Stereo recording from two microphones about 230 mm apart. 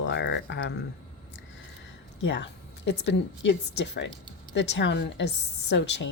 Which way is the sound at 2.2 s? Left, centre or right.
Left.